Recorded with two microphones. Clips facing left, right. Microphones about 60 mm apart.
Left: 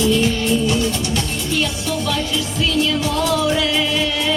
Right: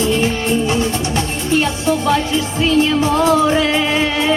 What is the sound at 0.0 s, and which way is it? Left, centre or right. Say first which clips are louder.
Music: right 1 dB; right.